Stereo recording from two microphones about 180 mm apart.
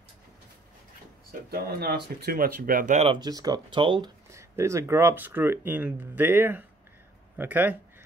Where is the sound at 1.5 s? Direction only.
60° right (ahead or behind); by 3.1 s 45° right (ahead or behind).